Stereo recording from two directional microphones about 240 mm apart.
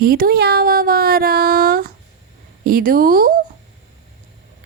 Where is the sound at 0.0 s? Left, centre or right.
Right.